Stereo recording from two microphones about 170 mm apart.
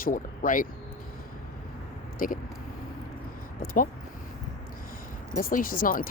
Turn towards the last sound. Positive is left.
turn(degrees=55)  # may be behind; listen again after turning